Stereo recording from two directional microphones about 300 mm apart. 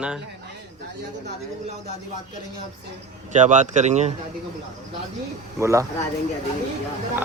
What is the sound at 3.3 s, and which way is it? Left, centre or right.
Speech, right.